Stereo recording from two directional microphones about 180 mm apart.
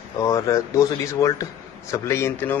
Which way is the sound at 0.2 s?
20° left (ahead or behind).